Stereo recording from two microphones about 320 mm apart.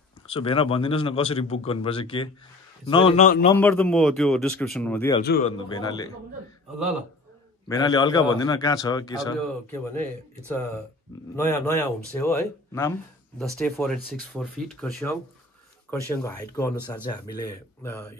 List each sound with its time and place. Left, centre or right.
0.3 s a man's voice: centre
3.5 s speech: centre
5.2 s a man's voice: left
5.6 s a man's voice: centre
7.6 s a man's voice: centre
11.3 s a man's voice: centre